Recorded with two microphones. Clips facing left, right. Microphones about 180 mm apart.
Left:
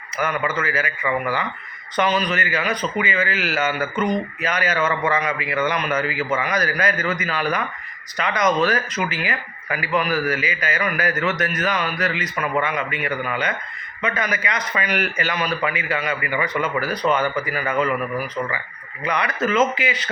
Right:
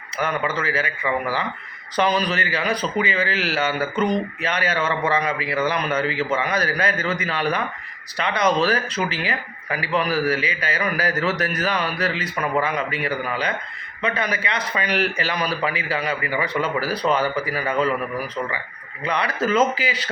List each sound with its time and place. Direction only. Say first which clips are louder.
0.2 s a man's voice: left 1 dB; 30° right (ahead or behind)
2.0 s a man's voice: even; 35° right (ahead or behind)
19.0 s a man's voice: even; 30° right (ahead or behind)